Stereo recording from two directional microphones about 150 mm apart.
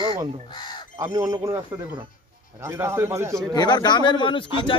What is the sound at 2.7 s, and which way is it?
Speech, 15° right (ahead or behind).